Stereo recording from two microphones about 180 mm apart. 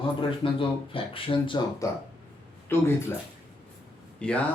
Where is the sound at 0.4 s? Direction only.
30° left (ahead or behind).